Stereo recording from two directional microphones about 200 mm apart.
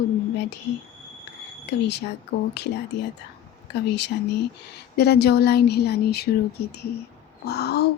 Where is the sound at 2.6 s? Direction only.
60° left (ahead or behind).